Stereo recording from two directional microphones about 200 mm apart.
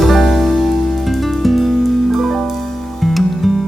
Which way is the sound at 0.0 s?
Centre (ahead or behind).